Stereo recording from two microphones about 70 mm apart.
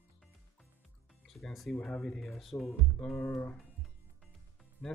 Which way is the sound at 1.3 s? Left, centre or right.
Centre.